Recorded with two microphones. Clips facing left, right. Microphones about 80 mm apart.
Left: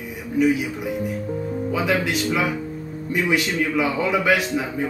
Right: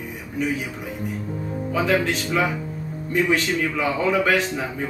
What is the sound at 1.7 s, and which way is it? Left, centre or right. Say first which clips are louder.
A man's voice: right 2 dB; centre.